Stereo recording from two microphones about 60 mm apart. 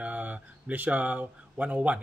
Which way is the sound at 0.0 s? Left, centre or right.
Right.